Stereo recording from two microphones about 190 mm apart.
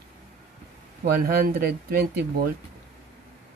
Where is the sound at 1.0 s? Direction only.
50° right (ahead or behind).